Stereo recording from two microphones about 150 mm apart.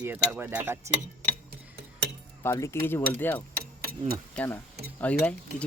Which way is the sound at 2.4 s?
15° left (ahead or behind).